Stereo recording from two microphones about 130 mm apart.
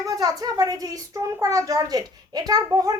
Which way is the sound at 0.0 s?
30° right (ahead or behind).